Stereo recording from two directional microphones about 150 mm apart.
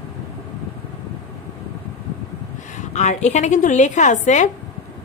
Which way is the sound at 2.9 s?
50° left (ahead or behind).